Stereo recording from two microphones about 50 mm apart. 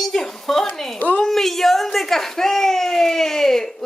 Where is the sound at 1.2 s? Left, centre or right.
Centre.